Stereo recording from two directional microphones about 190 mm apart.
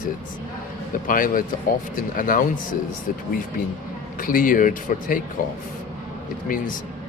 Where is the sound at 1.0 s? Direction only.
45° left (ahead or behind).